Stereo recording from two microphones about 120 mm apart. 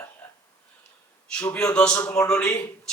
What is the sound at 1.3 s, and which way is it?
Speech, 5° left (ahead or behind).